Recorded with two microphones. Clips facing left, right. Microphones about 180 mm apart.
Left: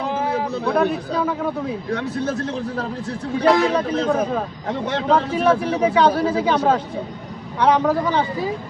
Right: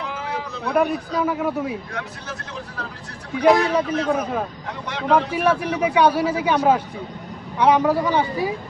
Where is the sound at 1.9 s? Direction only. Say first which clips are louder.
Left 9 dB; 35° left (ahead or behind).